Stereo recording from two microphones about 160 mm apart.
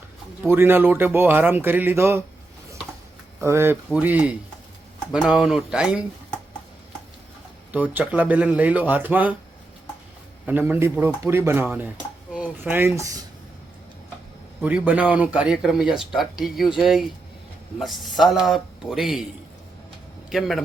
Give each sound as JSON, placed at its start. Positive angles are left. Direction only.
{"t": 0.4, "sound": "speech", "side_deg": -15}
{"t": 3.4, "sound": "speech", "side_deg": -15}
{"t": 7.7, "sound": "speech", "side_deg": -10}
{"t": 10.4, "sound": "speech", "side_deg": -10}
{"t": 14.6, "sound": "speech", "side_deg": -10}